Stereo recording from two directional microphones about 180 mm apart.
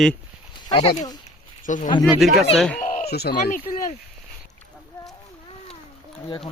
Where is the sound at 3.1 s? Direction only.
60° left (ahead or behind).